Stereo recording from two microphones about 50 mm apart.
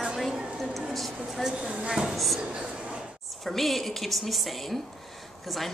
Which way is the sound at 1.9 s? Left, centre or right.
Centre.